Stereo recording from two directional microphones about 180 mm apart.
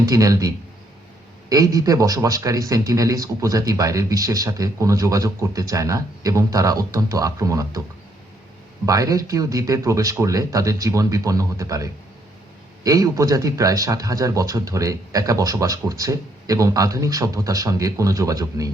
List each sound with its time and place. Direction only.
0.0 s a man's voice: 20° right (ahead or behind)
8.9 s a man's voice: 20° right (ahead or behind)